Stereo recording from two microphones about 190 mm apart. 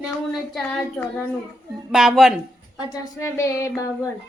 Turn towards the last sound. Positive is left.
turn(degrees=15)  # may be behind; listen again after turning